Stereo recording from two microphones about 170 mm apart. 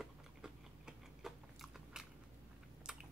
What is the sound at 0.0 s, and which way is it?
Tick-tock, 5° right (ahead or behind).